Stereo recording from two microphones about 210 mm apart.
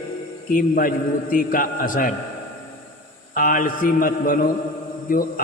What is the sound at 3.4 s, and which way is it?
A man's voice, 40° left (ahead or behind).